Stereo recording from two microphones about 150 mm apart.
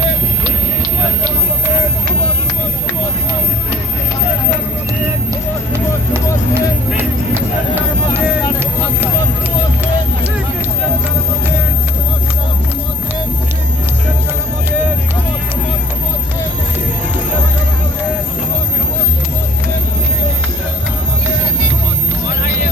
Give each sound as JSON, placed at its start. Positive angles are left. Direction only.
{"t": 6.5, "sound": "music", "side_deg": -15}